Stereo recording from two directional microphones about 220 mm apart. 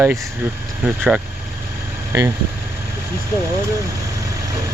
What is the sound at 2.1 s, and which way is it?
Speech, 15° right (ahead or behind).